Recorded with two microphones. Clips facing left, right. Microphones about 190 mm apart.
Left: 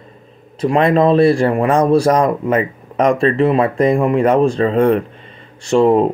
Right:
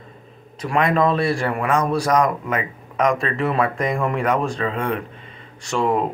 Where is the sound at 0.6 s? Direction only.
25° left (ahead or behind).